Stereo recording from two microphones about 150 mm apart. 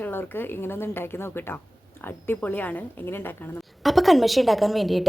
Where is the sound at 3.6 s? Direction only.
Centre (ahead or behind).